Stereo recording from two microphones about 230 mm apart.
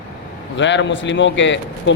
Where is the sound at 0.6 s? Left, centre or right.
Left.